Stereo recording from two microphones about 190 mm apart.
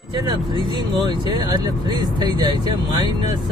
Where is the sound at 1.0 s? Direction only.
20° right (ahead or behind).